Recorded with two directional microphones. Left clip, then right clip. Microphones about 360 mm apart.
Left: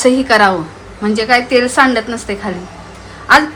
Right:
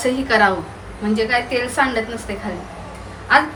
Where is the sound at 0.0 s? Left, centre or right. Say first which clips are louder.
Left 6 dB; centre.